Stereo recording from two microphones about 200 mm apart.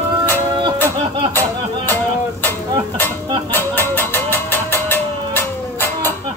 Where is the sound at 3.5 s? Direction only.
10° left (ahead or behind).